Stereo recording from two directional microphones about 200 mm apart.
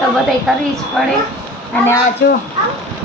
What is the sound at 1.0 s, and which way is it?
Speech, centre (ahead or behind).